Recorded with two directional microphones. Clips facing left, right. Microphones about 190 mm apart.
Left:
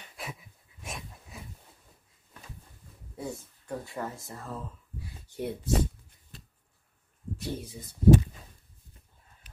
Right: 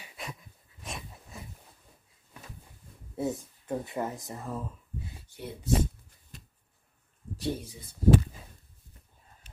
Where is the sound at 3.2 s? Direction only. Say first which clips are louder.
Right 6 dB; 20° right (ahead or behind).